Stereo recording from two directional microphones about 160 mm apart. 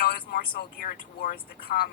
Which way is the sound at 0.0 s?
70° left (ahead or behind).